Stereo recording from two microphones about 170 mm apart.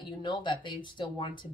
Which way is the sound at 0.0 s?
25° left (ahead or behind).